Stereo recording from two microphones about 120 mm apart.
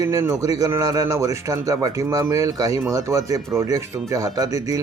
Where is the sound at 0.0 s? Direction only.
25° right (ahead or behind).